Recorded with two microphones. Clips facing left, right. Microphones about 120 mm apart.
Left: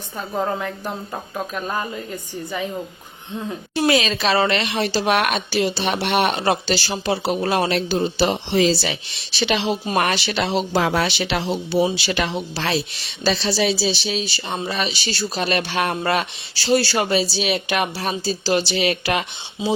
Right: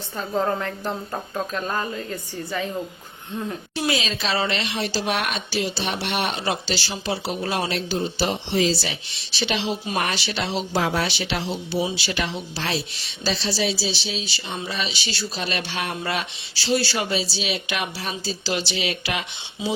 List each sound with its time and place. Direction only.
0.2 s speech: 5° left (ahead or behind)
3.8 s a woman's voice: 65° left (ahead or behind)